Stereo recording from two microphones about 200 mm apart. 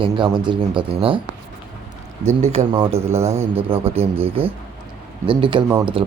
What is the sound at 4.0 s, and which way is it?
Speech, 30° right (ahead or behind).